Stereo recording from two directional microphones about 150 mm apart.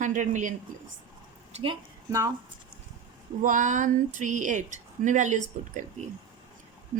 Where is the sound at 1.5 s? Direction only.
35° right (ahead or behind).